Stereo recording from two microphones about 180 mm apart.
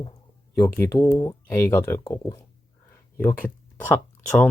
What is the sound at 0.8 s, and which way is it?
Speech, 15° left (ahead or behind).